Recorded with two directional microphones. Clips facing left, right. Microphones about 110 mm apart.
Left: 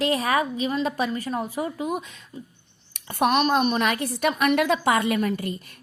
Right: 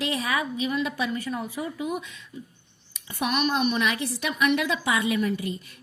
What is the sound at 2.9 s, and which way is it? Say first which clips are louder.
A woman's voice: left 6 dB; 55° left (ahead or behind).